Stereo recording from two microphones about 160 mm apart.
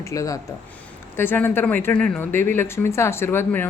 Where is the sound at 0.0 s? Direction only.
20° left (ahead or behind).